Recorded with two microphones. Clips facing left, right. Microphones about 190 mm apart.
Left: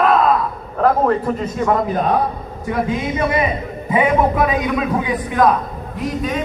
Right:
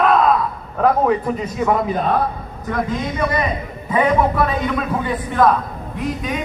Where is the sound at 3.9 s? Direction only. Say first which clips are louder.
Left 1 dB; 10° left (ahead or behind).